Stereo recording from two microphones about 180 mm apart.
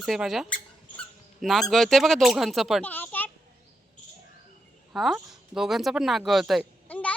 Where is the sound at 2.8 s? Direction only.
10° left (ahead or behind).